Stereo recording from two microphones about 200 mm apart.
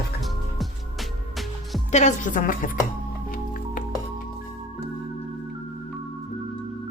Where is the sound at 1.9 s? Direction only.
35° left (ahead or behind).